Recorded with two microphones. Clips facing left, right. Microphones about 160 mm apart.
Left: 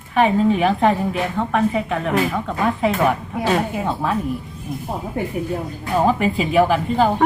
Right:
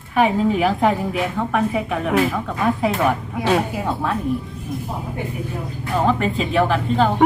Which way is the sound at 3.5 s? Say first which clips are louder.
Right 1 dB; centre (ahead or behind).